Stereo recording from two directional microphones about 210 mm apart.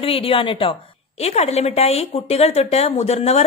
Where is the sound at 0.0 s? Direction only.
25° left (ahead or behind).